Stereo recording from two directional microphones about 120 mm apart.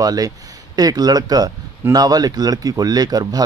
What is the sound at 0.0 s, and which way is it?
Speech, 30° right (ahead or behind).